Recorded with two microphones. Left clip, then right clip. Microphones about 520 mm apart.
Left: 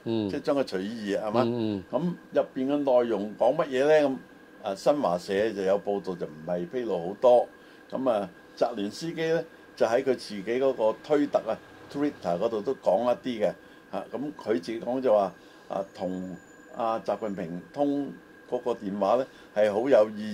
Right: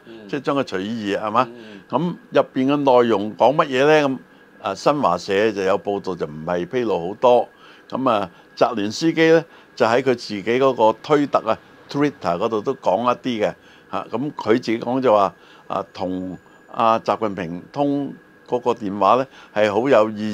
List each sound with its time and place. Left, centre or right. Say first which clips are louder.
0.3 s a man's voice: right 9 dB; right